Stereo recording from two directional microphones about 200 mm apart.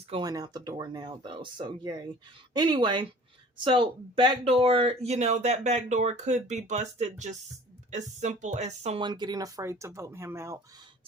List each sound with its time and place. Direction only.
0.1 s speech: 20° right (ahead or behind)